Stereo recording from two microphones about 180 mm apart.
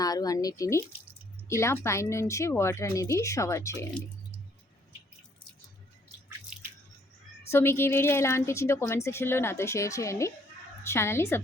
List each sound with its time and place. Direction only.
0.0 s a woman's voice: 20° left (ahead or behind)
7.5 s a woman's voice: 15° left (ahead or behind)